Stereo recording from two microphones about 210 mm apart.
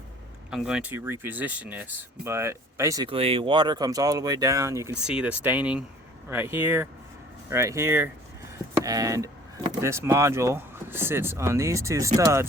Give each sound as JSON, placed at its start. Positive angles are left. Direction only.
{"t": 0.5, "sound": "speech", "side_deg": -5}